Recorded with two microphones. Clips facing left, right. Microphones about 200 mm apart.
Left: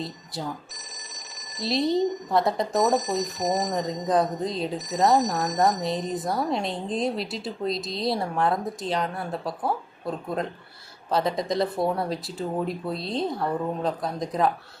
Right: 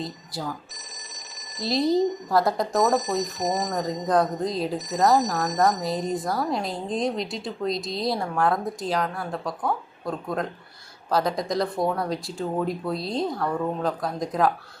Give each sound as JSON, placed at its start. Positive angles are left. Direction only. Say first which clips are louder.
{"t": 1.4, "sound": "speech", "louder": "right 1 dB", "side_deg": 0}
{"t": 11.1, "sound": "speech", "louder": "even", "side_deg": 0}
{"t": 13.3, "sound": "speech", "louder": "even", "side_deg": 25}
{"t": 13.8, "sound": "speech", "louder": "right 1 dB", "side_deg": 0}